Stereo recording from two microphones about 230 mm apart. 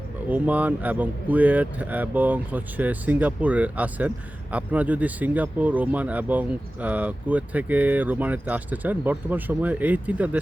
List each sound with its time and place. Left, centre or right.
0.3 s speech: centre